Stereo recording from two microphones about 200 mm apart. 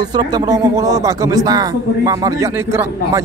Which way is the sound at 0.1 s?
20° right (ahead or behind).